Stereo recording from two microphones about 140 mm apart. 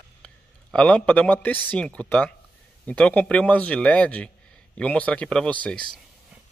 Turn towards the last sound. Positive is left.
turn(degrees=5)  # may be behind; listen again after turning